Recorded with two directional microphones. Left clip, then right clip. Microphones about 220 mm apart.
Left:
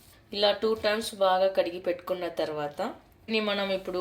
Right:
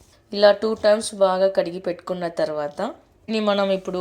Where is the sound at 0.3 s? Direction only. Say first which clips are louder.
Right 9 dB; 35° right (ahead or behind).